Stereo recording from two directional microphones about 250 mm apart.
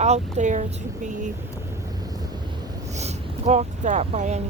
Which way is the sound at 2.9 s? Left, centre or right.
Right.